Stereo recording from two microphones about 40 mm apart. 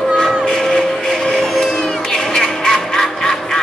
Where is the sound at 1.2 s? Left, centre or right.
Centre.